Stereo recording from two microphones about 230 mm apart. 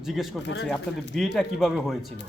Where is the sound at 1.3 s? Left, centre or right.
Centre.